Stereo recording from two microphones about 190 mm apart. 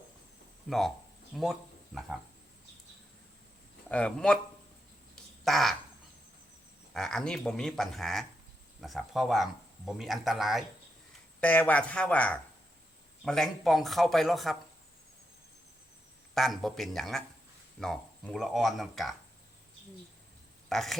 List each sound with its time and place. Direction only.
0.7 s speech: centre (ahead or behind)
3.8 s speech: 5° left (ahead or behind)
5.1 s a sound: centre (ahead or behind)
6.9 s speech: centre (ahead or behind)
16.3 s speech: centre (ahead or behind)
20.7 s speech: centre (ahead or behind)